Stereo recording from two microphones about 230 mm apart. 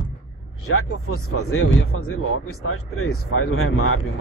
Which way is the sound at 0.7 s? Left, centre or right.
Left.